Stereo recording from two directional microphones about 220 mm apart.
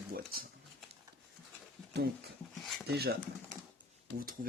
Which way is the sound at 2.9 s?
45° right (ahead or behind).